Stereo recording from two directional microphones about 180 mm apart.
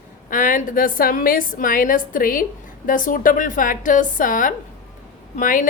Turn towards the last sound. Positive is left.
turn(degrees=50)  # may be behind; listen again after turning